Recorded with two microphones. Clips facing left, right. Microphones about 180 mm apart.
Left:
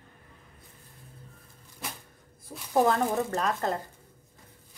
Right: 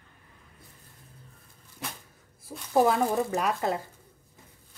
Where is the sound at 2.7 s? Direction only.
10° right (ahead or behind).